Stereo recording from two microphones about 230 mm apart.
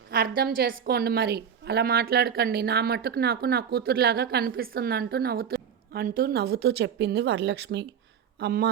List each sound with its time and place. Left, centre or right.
0.1 s a woman's voice: right